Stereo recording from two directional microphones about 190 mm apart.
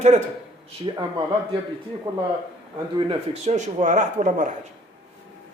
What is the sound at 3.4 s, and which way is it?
Speech, 40° right (ahead or behind).